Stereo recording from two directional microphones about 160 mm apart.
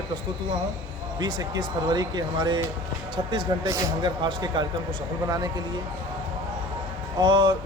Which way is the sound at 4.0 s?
30° right (ahead or behind).